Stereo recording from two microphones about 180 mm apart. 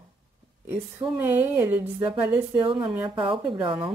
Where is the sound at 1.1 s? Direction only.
10° right (ahead or behind).